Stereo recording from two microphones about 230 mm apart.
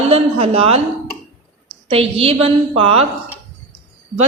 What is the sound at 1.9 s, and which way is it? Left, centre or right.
A woman's voice, right.